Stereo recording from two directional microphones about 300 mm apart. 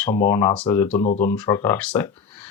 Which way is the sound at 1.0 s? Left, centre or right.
Left.